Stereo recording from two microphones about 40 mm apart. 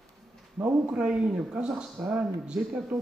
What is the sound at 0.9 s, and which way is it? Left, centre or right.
A man's voice, right.